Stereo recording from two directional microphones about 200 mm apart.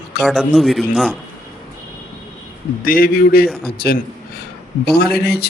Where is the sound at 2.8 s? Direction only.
45° left (ahead or behind).